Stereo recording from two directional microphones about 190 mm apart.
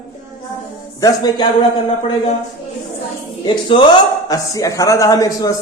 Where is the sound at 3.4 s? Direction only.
25° left (ahead or behind).